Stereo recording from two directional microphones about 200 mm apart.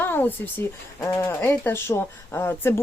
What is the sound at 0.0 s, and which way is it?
Speech, 10° left (ahead or behind).